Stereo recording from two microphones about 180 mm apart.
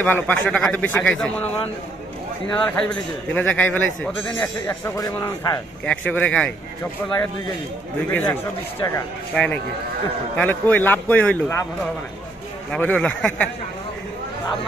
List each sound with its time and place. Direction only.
0.0 s a man's voice: 10° left (ahead or behind)
2.5 s a man's voice: 5° left (ahead or behind)
5.9 s a man's voice: 10° left (ahead or behind)
8.1 s a man's voice: 10° left (ahead or behind)
12.7 s speech: 5° left (ahead or behind)